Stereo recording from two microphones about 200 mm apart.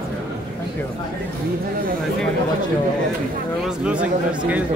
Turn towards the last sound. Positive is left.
turn(degrees=-5)  # may be behind; listen again after turning